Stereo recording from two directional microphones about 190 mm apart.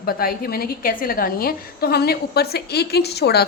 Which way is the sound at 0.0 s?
50° left (ahead or behind).